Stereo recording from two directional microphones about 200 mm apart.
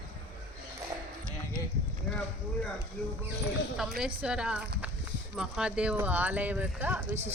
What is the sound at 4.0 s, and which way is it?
A woman's voice, 5° right (ahead or behind).